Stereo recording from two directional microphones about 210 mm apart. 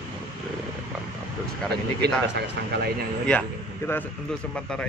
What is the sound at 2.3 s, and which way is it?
Speech, 50° right (ahead or behind).